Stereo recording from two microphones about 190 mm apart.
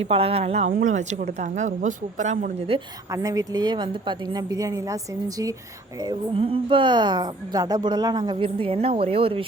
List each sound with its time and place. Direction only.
0.1 s a woman's voice: 30° right (ahead or behind)
3.1 s a woman's voice: 15° right (ahead or behind)
6.0 s a woman's voice: 25° right (ahead or behind)